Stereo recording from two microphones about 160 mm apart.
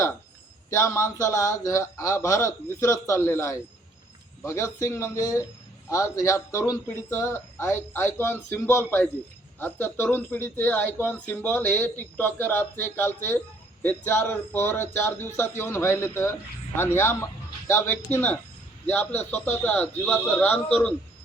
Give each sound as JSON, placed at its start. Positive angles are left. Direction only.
{"t": 0.7, "sound": "speech", "side_deg": 20}